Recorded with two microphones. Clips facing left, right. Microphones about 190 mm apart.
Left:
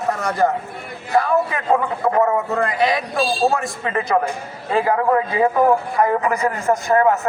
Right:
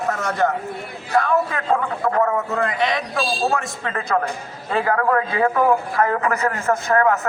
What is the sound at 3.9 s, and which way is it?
A man's voice, 15° left (ahead or behind).